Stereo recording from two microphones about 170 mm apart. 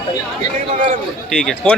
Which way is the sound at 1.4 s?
5° left (ahead or behind).